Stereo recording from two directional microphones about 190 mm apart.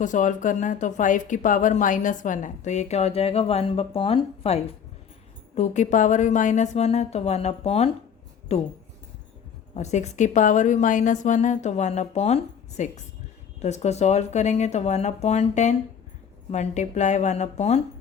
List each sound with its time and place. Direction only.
0.0 s speech: 40° left (ahead or behind)
9.7 s speech: 35° left (ahead or behind)